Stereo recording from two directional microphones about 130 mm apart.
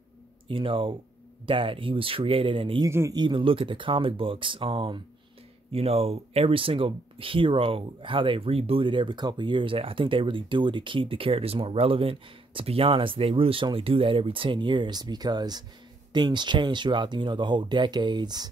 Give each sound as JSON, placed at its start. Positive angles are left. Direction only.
{"t": 0.5, "sound": "speech", "side_deg": -40}
{"t": 2.8, "sound": "speech", "side_deg": -25}
{"t": 3.2, "sound": "speech", "side_deg": -40}
{"t": 5.7, "sound": "speech", "side_deg": -50}